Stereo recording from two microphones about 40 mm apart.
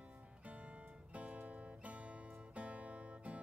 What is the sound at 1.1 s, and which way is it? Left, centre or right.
Music, right.